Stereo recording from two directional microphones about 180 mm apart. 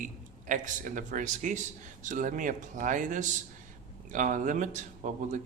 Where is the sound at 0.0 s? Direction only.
45° right (ahead or behind).